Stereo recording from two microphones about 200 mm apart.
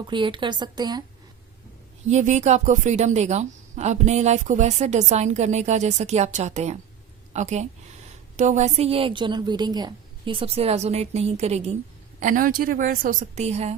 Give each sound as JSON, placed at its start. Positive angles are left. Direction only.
{"t": 0.1, "sound": "a woman's voice", "side_deg": -25}
{"t": 2.0, "sound": "a woman's voice", "side_deg": -35}